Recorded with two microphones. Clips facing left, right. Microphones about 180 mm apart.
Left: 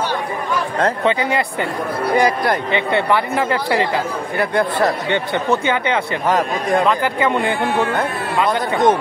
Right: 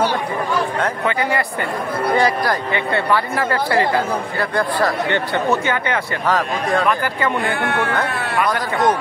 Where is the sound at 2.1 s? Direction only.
20° left (ahead or behind).